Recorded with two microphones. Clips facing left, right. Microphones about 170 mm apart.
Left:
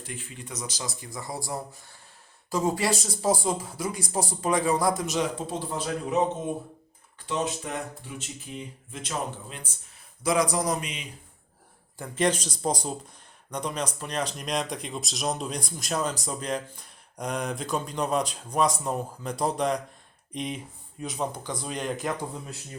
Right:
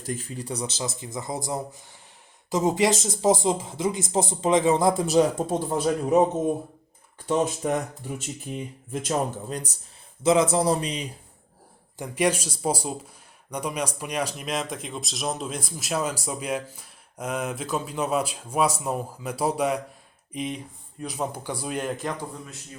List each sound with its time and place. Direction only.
0.0 s speech: 40° right (ahead or behind)
5.4 s speech: 50° right (ahead or behind)
7.3 s speech: 45° right (ahead or behind)
10.2 s speech: 25° right (ahead or behind)
11.9 s speech: 15° right (ahead or behind)